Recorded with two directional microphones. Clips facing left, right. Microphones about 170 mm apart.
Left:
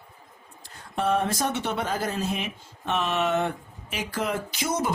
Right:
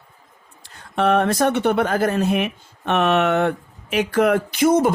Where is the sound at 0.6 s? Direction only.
75° right (ahead or behind); by 4.9 s 55° right (ahead or behind).